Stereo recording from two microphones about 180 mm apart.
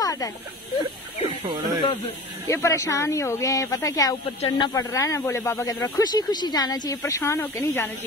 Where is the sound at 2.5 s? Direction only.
15° left (ahead or behind).